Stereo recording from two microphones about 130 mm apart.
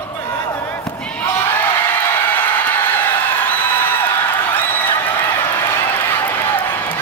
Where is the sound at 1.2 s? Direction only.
20° left (ahead or behind).